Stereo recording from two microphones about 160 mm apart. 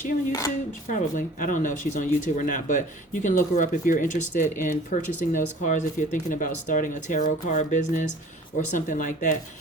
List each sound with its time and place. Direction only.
0.9 s speech: 55° left (ahead or behind)